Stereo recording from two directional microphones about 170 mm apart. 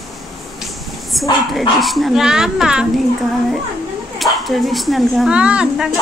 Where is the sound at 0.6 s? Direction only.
Centre (ahead or behind).